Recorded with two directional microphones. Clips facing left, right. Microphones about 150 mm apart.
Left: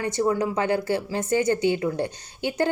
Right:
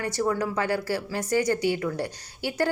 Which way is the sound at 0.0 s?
20° left (ahead or behind).